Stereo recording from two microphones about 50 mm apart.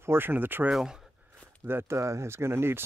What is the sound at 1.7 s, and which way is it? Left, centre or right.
Speech, right.